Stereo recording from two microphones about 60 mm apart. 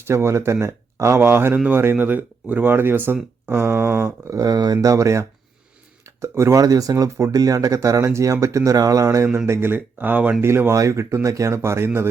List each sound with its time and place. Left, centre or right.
0.1 s speech: right
1.2 s speech: right
4.3 s speech: right
6.2 s speech: right
6.6 s speech: right
9.0 s speech: right
10.4 s speech: right
10.8 s speech: right